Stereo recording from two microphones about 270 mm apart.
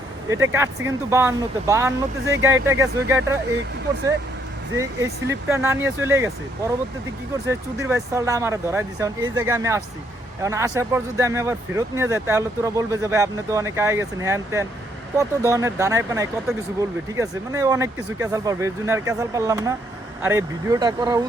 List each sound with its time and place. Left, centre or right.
0.3 s speech: centre
4.8 s speech: centre
7.8 s speech: centre